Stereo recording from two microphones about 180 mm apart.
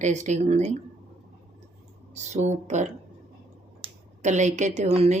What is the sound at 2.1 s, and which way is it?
A woman's voice, 40° right (ahead or behind).